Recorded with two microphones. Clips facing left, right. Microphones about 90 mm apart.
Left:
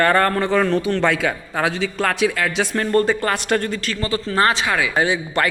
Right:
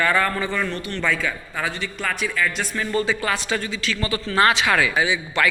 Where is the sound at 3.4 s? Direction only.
60° left (ahead or behind).